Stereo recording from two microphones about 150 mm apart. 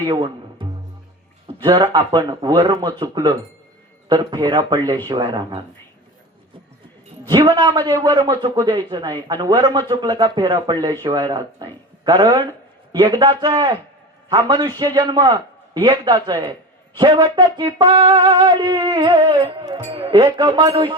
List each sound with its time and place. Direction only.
0.0 s music: 35° right (ahead or behind)
2.2 s a man's voice: 25° right (ahead or behind)
7.3 s a man's voice: 25° right (ahead or behind)
17.0 s music: 30° right (ahead or behind)